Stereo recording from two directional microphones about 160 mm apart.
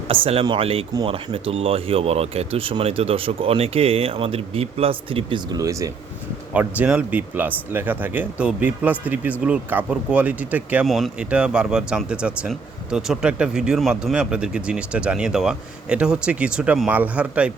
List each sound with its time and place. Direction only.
0.1 s speech: 35° right (ahead or behind)
6.5 s speech: 10° right (ahead or behind)